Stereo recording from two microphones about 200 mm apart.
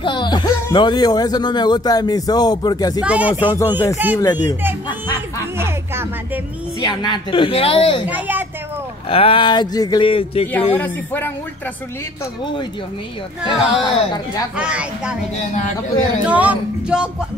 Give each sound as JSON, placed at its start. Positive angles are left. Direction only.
{"t": 0.0, "sound": "speech", "side_deg": 25}
{"t": 3.0, "sound": "speech", "side_deg": -5}
{"t": 3.5, "sound": "speech", "side_deg": 15}
{"t": 3.9, "sound": "speech", "side_deg": -10}
{"t": 4.2, "sound": "speech", "side_deg": 20}
{"t": 4.8, "sound": "music", "side_deg": 20}
{"t": 5.6, "sound": "a sound", "side_deg": -10}
{"t": 6.8, "sound": "speech", "side_deg": 20}
{"t": 8.1, "sound": "speech", "side_deg": -10}
{"t": 9.1, "sound": "speech", "side_deg": 25}
{"t": 10.7, "sound": "speech", "side_deg": 10}
{"t": 13.5, "sound": "speech", "side_deg": 20}
{"t": 14.6, "sound": "female singing", "side_deg": -5}
{"t": 16.3, "sound": "female singing", "side_deg": -5}